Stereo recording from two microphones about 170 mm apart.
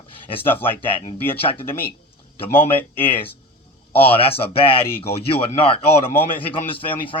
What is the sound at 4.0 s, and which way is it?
A man's voice, 35° left (ahead or behind).